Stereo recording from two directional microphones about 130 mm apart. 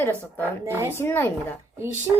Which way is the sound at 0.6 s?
20° right (ahead or behind).